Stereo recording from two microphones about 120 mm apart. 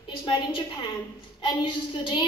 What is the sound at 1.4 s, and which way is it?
Speech, 40° left (ahead or behind).